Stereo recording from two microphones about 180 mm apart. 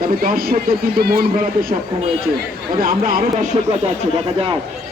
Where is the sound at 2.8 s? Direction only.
55° right (ahead or behind).